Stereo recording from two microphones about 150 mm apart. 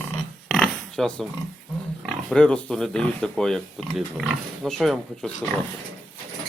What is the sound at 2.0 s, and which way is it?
Speech, 5° left (ahead or behind).